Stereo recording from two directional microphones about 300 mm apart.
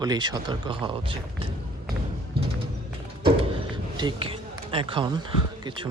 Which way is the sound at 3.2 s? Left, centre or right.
Centre.